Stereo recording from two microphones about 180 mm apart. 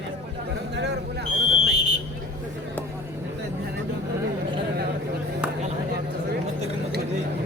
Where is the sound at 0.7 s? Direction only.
70° right (ahead or behind).